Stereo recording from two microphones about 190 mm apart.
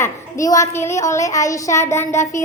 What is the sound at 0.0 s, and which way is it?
A woman's voice, 15° left (ahead or behind).